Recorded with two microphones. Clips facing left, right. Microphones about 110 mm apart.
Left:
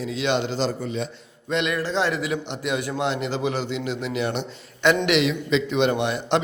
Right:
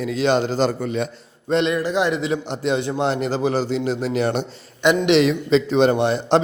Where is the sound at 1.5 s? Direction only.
35° right (ahead or behind).